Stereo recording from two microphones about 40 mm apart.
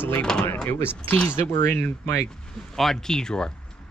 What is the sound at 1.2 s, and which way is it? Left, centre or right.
Speech, left.